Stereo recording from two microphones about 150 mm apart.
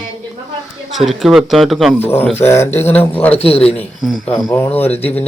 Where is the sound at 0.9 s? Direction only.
Centre (ahead or behind).